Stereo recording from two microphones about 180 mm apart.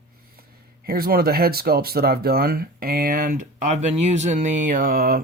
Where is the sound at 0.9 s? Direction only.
55° right (ahead or behind).